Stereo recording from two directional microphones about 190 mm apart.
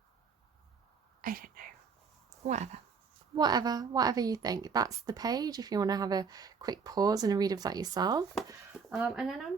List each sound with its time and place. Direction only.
1.2 s speech: 50° right (ahead or behind)
2.4 s speech: 35° right (ahead or behind)
3.3 s a woman's voice: 20° right (ahead or behind)
8.9 s speech: 5° right (ahead or behind)